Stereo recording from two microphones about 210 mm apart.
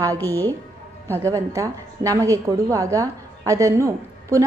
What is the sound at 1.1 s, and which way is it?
A woman's voice, 15° right (ahead or behind).